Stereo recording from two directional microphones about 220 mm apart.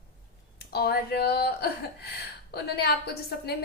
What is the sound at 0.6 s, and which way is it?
A woman's voice, 45° left (ahead or behind).